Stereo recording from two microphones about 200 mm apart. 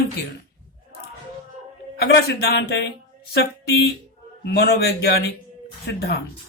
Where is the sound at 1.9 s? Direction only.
55° left (ahead or behind).